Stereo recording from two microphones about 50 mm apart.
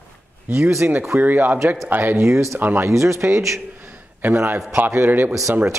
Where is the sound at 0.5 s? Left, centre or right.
Right.